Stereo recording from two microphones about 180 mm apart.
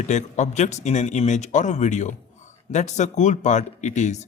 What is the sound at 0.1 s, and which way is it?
A man's voice, 40° left (ahead or behind).